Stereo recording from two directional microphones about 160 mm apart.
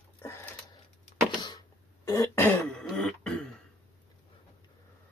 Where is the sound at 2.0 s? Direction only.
20° left (ahead or behind).